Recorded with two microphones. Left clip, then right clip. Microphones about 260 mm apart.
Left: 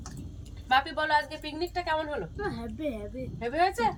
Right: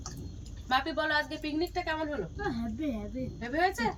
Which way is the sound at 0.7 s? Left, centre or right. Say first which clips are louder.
Left 4 dB; centre.